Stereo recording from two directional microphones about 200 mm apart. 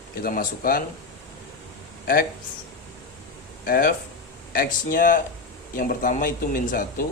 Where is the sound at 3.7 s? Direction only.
45° left (ahead or behind).